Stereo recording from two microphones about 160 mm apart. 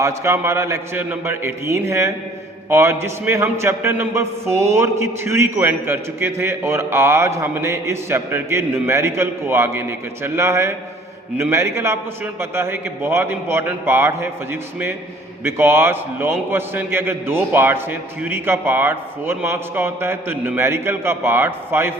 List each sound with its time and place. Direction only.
0.0 s a man's voice: 15° right (ahead or behind)